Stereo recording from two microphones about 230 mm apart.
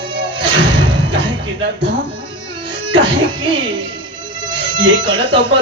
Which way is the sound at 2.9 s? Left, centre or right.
Right.